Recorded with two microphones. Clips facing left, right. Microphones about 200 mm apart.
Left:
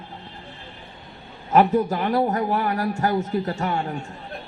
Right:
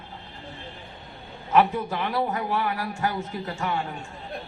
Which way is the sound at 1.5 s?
40° left (ahead or behind).